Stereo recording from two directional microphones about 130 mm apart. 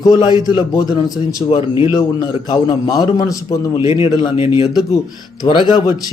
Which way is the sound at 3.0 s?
30° left (ahead or behind).